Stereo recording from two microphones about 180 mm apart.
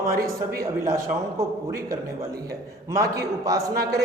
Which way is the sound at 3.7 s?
60° right (ahead or behind).